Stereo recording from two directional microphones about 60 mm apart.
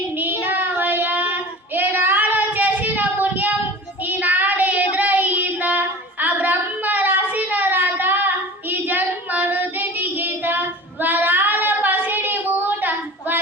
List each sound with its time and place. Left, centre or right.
0.2 s child singing: right